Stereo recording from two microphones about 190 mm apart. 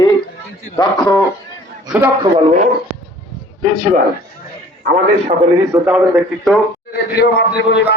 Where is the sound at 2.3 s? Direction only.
35° right (ahead or behind).